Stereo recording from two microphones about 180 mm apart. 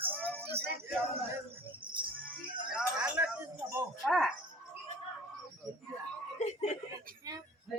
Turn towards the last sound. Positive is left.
turn(degrees=40)  # may be behind; listen again after turning